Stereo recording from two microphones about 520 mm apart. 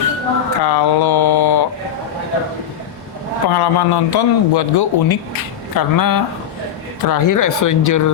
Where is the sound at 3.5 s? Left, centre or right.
Left.